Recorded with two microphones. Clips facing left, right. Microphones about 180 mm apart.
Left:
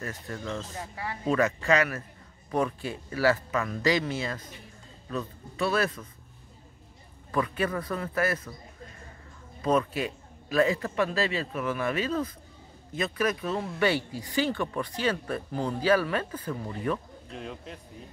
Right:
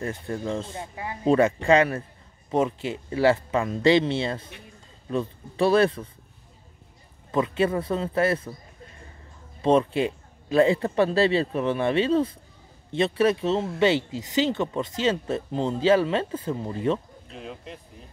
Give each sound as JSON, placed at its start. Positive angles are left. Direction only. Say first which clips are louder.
{"t": 0.0, "sound": "speech", "louder": "right 6 dB", "side_deg": -25}
{"t": 7.2, "sound": "speech", "louder": "right 5 dB", "side_deg": -25}
{"t": 9.6, "sound": "speech", "louder": "right 5 dB", "side_deg": -25}
{"t": 17.3, "sound": "speech", "louder": "right 1 dB", "side_deg": 0}